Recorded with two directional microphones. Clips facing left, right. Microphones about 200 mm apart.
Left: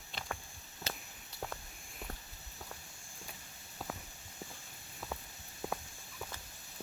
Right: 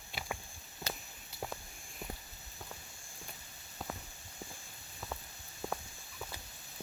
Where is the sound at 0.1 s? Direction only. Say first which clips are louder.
Right 1 dB; 10° right (ahead or behind).